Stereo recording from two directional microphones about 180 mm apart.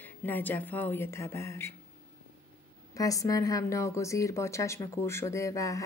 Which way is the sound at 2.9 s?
20° left (ahead or behind).